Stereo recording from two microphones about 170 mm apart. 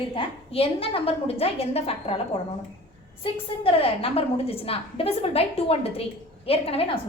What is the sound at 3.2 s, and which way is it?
A woman's voice, 30° left (ahead or behind).